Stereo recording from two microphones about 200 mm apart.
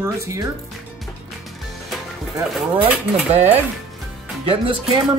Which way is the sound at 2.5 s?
5° right (ahead or behind).